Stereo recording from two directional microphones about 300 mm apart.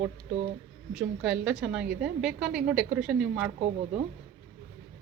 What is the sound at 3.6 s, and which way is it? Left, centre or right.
Speech, right.